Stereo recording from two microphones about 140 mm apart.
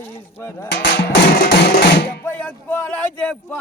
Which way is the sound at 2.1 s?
10° left (ahead or behind).